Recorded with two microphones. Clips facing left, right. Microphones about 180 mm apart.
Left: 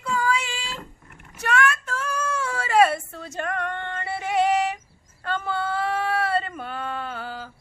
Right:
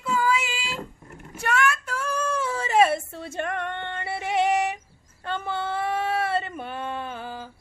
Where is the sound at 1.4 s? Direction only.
10° right (ahead or behind).